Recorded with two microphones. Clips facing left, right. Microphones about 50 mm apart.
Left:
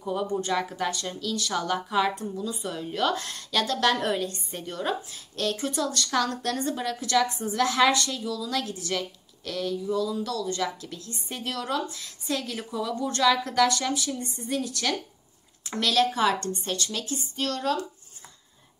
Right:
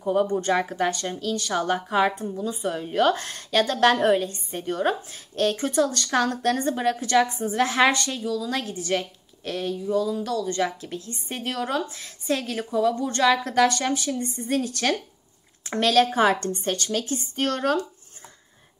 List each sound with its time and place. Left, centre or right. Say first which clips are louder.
0.0 s a woman's voice: right 6 dB; right
12.5 s a woman's voice: right 7 dB; right
15.6 s a woman's voice: right 4 dB; right